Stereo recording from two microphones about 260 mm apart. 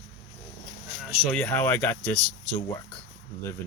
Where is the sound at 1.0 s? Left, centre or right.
Centre.